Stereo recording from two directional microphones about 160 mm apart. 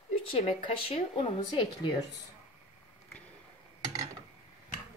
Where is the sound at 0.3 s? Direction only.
40° left (ahead or behind).